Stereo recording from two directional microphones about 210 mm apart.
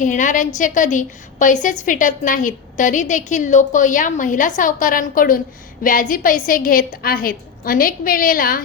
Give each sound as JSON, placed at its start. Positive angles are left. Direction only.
{"t": 0.0, "sound": "a woman's voice", "side_deg": 35}